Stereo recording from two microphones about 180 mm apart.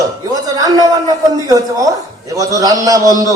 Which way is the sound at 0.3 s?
20° right (ahead or behind).